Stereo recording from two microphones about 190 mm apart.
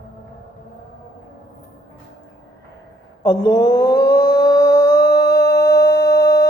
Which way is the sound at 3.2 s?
20° left (ahead or behind).